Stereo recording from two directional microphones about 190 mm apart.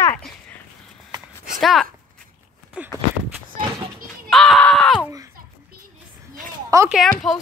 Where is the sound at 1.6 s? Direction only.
Centre (ahead or behind).